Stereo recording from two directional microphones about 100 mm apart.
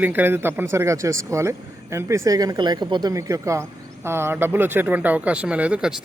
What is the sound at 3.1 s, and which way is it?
Speech, 35° right (ahead or behind).